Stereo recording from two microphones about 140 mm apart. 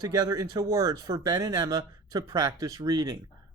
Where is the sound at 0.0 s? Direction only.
30° right (ahead or behind).